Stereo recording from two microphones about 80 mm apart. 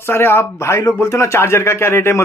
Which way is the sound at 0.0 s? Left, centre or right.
Left.